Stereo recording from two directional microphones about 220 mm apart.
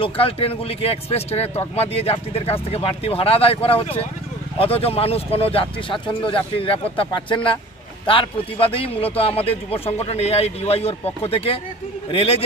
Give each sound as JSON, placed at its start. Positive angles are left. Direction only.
{"t": 0.0, "sound": "speech", "side_deg": 25}